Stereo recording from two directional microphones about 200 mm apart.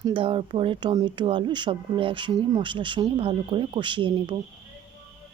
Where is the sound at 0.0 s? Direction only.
25° right (ahead or behind).